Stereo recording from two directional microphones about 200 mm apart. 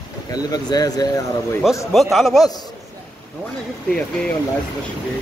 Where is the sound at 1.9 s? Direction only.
Centre (ahead or behind).